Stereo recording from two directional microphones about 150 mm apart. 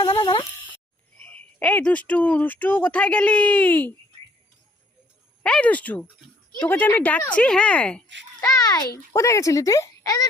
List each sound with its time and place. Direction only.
0.0 s a sound: 35° left (ahead or behind)
1.2 s speech: 10° left (ahead or behind)
5.4 s speech: 10° left (ahead or behind)
8.4 s speech: 25° left (ahead or behind)